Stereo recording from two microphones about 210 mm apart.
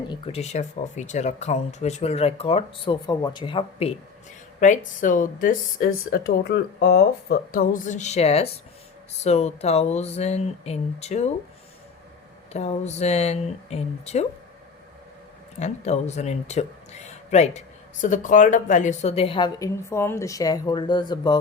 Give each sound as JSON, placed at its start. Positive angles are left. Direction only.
{"t": 0.1, "sound": "speech", "side_deg": 30}
{"t": 4.6, "sound": "speech", "side_deg": 35}
{"t": 12.5, "sound": "speech", "side_deg": 30}
{"t": 15.5, "sound": "speech", "side_deg": 30}